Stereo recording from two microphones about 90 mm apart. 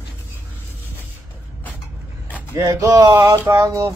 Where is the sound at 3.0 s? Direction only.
50° right (ahead or behind).